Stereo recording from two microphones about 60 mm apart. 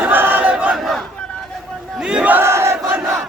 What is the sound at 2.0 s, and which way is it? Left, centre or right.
Battle cry, centre.